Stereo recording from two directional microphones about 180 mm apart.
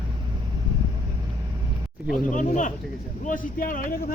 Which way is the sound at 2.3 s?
45° left (ahead or behind).